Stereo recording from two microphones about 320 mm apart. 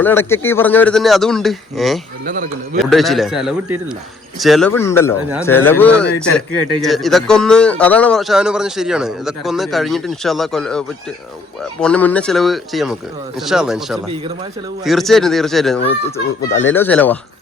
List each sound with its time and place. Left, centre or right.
0.0 s a man's voice: centre
2.2 s speech: right
2.7 s a man's voice: centre